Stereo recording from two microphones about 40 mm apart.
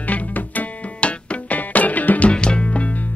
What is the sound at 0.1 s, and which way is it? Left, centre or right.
Music, left.